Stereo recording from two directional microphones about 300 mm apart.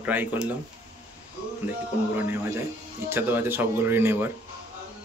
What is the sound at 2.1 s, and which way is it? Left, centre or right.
Speech, centre.